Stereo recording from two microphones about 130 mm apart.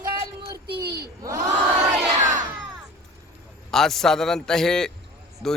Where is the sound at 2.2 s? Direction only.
70° right (ahead or behind).